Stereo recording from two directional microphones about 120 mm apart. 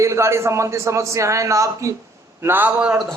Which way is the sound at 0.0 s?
25° right (ahead or behind).